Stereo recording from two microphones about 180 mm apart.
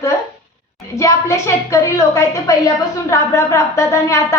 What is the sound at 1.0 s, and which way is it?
A woman's voice, 15° left (ahead or behind).